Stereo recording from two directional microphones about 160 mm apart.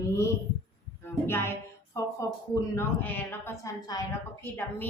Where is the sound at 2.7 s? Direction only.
15° left (ahead or behind).